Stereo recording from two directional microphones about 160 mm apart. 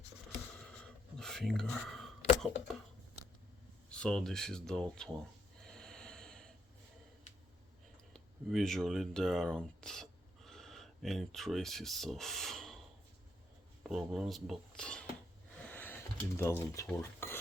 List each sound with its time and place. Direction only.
1.2 s a sound: 5° left (ahead or behind)
3.8 s speech: 5° left (ahead or behind)
5.6 s snort: 5° left (ahead or behind)
8.1 s speech: centre (ahead or behind)
13.8 s speech: centre (ahead or behind)
15.6 s a sound: 10° left (ahead or behind)
16.4 s speech: 15° left (ahead or behind)